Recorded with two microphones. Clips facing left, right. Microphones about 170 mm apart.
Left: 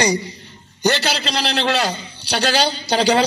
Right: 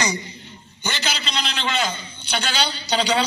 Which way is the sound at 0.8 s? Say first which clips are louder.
Left 9 dB; 70° left (ahead or behind).